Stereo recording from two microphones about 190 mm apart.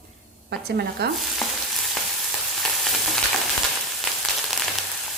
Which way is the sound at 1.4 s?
Centre (ahead or behind).